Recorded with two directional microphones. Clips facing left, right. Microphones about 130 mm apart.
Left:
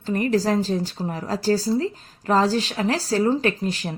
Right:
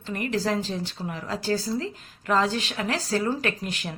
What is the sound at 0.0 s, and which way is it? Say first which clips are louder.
A woman's voice: left 6 dB; 35° left (ahead or behind).